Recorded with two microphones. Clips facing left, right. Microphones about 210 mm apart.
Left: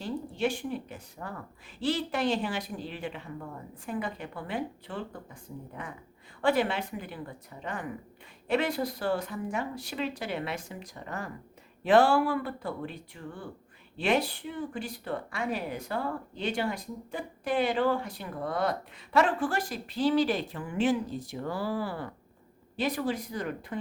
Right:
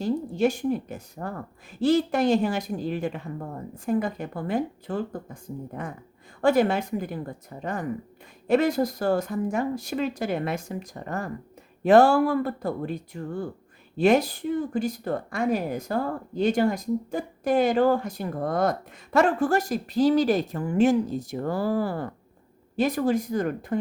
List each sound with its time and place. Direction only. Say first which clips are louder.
0.0 s speech: right 7 dB; 40° right (ahead or behind)